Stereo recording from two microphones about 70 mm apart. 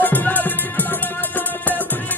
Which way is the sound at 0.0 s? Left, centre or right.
Left.